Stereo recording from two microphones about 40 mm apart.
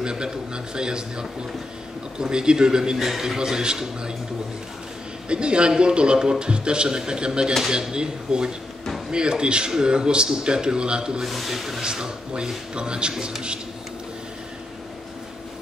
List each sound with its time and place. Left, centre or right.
0.0 s a man's voice: right
3.0 s a man's voice: centre
5.3 s a man's voice: right
11.1 s speech: centre
11.8 s a man's voice: centre